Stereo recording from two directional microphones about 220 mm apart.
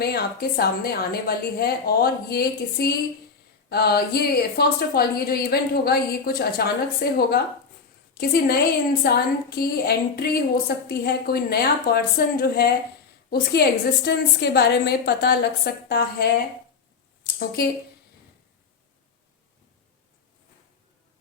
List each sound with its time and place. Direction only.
0.0 s a woman's voice: 45° left (ahead or behind)